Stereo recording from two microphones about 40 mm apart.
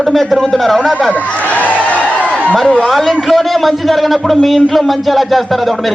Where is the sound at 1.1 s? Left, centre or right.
Left.